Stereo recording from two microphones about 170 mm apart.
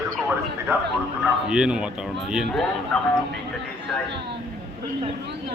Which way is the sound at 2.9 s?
10° left (ahead or behind).